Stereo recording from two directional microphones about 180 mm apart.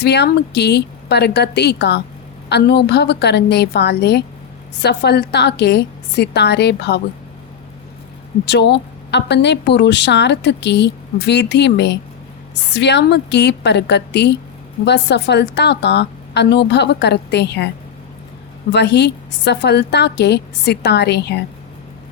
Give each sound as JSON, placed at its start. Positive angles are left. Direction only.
{"t": 0.0, "sound": "speech", "side_deg": 65}
{"t": 8.4, "sound": "speech", "side_deg": 70}
{"t": 18.7, "sound": "speech", "side_deg": 70}